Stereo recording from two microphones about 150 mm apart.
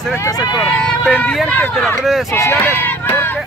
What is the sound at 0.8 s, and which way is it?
Speech, 5° left (ahead or behind).